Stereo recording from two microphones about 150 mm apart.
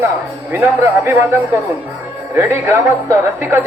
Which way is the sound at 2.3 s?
15° right (ahead or behind).